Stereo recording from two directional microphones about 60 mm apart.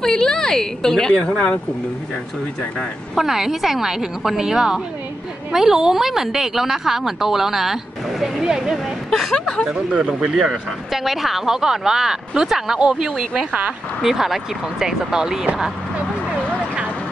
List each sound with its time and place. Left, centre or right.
0.0 s a woman's voice: centre
2.8 s speech: centre
9.1 s speech: centre
9.7 s speech: centre
10.3 s speech: centre